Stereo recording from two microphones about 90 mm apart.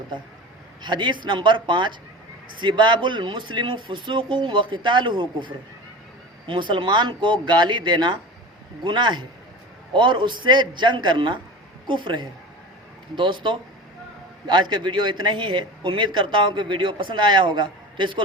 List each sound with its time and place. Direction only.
0.8 s a man's voice: 60° right (ahead or behind)